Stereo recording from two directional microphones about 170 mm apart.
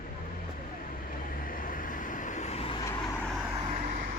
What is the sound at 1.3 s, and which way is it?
Vehicle, 55° left (ahead or behind).